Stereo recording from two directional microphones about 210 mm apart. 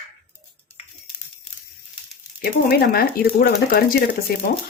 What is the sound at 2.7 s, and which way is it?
Speech, 50° left (ahead or behind).